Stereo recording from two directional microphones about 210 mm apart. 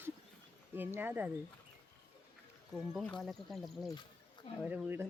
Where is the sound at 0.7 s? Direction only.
10° right (ahead or behind).